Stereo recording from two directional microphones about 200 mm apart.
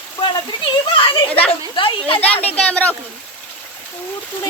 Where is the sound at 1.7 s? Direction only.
25° left (ahead or behind).